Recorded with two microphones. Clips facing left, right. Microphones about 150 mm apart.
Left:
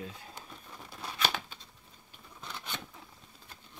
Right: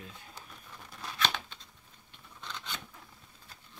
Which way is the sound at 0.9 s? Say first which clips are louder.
Even; 10° left (ahead or behind).